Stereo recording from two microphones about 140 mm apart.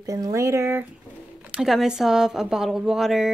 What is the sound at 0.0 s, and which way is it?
Speech, 25° right (ahead or behind).